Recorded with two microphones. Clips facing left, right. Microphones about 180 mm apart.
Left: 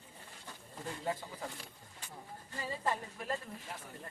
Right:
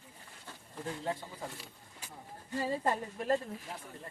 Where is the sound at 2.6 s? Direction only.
50° right (ahead or behind).